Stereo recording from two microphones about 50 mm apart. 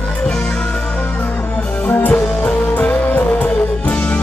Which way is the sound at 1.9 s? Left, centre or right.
Left.